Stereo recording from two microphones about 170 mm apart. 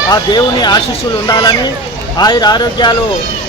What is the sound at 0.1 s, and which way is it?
Speech, 25° left (ahead or behind).